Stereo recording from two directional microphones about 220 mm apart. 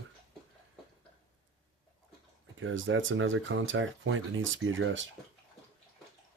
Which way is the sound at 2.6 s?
60° right (ahead or behind).